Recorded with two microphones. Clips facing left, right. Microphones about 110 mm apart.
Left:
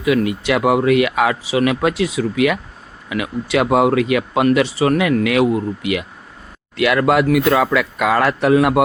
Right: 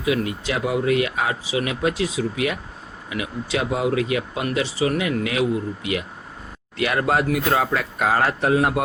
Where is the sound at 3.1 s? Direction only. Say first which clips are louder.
Left 7 dB; 70° left (ahead or behind).